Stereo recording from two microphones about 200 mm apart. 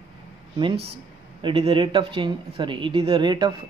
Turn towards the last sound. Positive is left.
turn(degrees=-20)  # may be behind; listen again after turning